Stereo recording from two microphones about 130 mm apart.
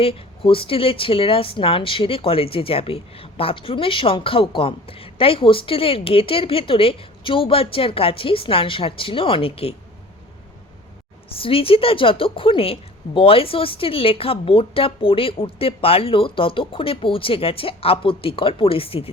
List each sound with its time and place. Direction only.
0.0 s speech: 45° left (ahead or behind)
11.3 s speech: 45° left (ahead or behind)